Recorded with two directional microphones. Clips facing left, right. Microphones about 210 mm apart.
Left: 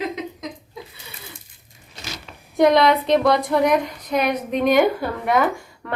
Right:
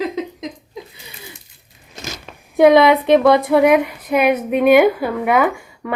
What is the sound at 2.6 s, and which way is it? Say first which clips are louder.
Speech: right 5 dB; 60° right (ahead or behind).